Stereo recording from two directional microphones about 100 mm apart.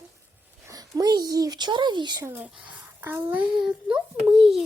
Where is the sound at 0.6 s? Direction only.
35° right (ahead or behind).